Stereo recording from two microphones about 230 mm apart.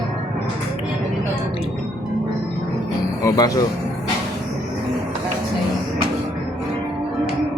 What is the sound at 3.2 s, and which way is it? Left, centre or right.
Speech, centre.